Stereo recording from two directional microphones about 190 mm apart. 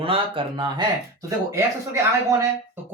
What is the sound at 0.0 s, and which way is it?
Speech, 30° right (ahead or behind).